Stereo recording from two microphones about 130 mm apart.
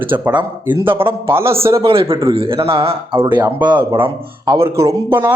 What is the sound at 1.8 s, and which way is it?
Speech, 45° right (ahead or behind).